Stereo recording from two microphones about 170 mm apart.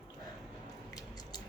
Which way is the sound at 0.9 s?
20° left (ahead or behind).